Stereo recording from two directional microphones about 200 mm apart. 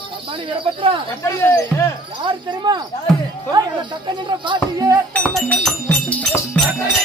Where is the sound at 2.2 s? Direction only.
25° right (ahead or behind).